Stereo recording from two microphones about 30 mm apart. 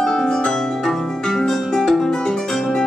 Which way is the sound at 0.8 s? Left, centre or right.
Centre.